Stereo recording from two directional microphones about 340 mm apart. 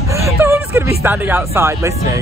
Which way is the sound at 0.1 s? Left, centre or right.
Centre.